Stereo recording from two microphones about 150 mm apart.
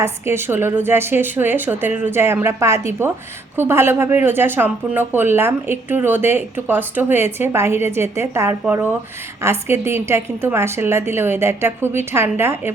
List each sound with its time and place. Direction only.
0.0 s a woman's voice: 15° right (ahead or behind)